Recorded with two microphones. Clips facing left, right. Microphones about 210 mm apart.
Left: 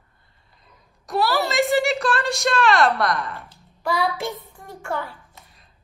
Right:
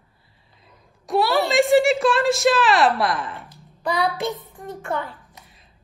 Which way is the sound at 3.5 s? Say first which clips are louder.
Even; 20° right (ahead or behind).